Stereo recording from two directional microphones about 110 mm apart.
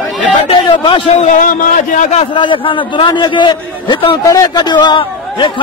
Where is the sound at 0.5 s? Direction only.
50° left (ahead or behind).